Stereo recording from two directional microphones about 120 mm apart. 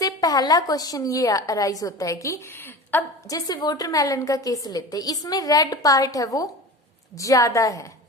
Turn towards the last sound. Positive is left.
turn(degrees=25)  # may be behind; listen again after turning